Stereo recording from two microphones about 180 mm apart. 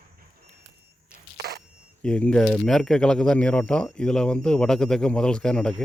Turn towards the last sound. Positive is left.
turn(degrees=5)  # may be behind; listen again after turning